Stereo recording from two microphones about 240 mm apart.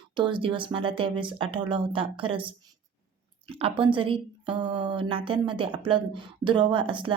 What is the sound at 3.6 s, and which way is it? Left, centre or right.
Speech, right.